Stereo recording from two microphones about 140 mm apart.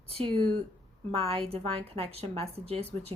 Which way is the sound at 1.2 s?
45° right (ahead or behind).